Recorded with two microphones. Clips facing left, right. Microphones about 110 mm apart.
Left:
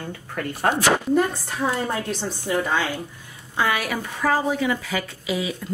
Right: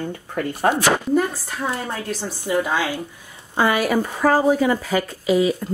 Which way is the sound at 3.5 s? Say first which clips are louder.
Right 5 dB; 40° right (ahead or behind).